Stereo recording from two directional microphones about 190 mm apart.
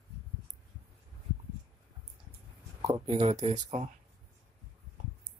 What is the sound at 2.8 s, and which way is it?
Speech, 20° right (ahead or behind).